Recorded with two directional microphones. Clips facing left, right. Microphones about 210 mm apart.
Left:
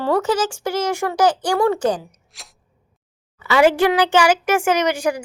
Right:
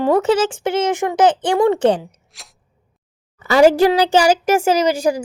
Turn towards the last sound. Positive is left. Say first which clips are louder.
# right 3 dB
turn(degrees=-40)  # may be behind; listen again after turning